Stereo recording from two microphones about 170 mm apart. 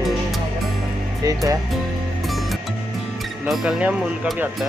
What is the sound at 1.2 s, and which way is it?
Speech, 20° right (ahead or behind).